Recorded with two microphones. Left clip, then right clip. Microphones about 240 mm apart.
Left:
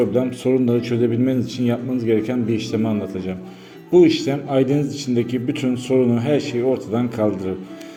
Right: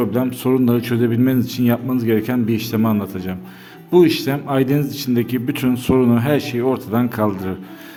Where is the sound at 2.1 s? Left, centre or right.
Right.